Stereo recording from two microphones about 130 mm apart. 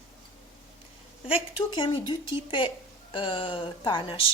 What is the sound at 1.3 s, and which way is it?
Speech, 40° left (ahead or behind).